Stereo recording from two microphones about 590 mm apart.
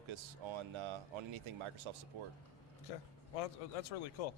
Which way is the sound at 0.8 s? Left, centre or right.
Right.